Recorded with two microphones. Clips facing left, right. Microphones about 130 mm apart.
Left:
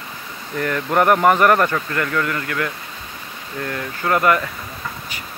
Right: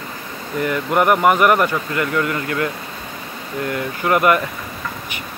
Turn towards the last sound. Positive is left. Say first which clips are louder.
# right 2 dB
turn(degrees=-20)  # may be behind; listen again after turning